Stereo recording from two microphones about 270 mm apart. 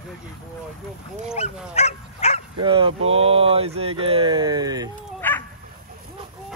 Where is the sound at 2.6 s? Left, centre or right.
Centre.